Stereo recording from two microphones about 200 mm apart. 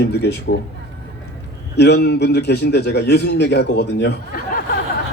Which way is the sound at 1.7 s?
55° left (ahead or behind).